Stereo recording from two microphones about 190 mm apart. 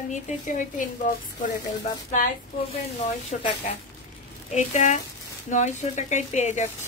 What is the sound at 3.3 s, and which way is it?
Speech, 45° left (ahead or behind).